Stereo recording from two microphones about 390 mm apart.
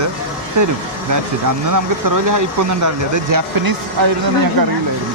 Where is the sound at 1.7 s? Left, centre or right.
Right.